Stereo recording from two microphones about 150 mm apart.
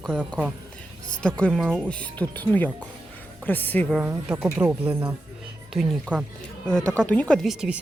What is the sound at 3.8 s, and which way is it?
A woman's voice, 5° right (ahead or behind).